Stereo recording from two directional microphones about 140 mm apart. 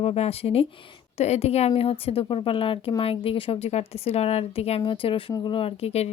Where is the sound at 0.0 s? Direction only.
45° left (ahead or behind).